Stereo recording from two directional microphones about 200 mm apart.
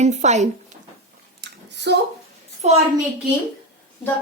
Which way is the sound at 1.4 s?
60° right (ahead or behind).